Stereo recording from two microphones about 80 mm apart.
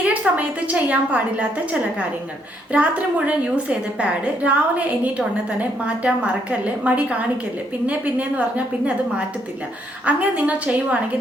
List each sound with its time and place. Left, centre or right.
0.0 s a woman's voice: centre
10.1 s a woman's voice: centre